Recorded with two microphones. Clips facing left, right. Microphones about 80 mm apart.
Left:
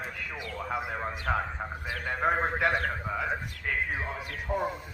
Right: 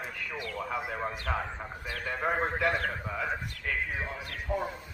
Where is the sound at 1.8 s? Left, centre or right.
Centre.